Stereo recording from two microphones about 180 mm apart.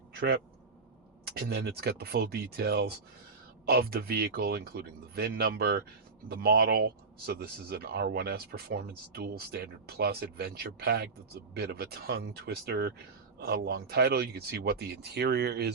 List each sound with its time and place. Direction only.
1.4 s speech: 65° right (ahead or behind)